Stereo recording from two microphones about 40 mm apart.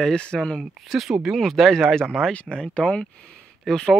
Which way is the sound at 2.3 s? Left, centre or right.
Left.